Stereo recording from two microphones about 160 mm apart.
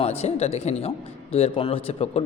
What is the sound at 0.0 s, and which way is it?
A man's voice, 40° left (ahead or behind).